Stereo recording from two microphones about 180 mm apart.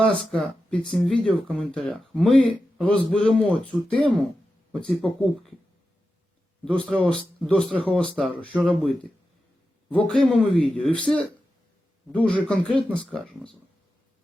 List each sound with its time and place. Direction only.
0.2 s speech: 5° left (ahead or behind)
5.0 s speech: centre (ahead or behind)
6.7 s speech: 5° left (ahead or behind)
9.9 s speech: centre (ahead or behind)